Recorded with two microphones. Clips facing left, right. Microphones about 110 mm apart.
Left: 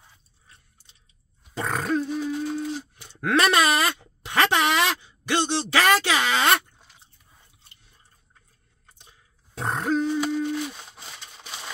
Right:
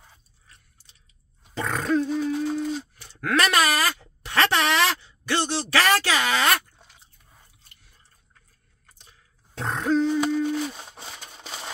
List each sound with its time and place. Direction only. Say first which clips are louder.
1.6 s speech: right 1 dB; centre (ahead or behind)
2.0 s a sound: right 2 dB; 10° left (ahead or behind)
9.6 s grunt: right 2 dB; 10° left (ahead or behind)